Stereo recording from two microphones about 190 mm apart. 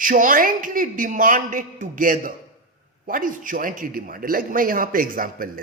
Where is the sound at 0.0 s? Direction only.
45° right (ahead or behind).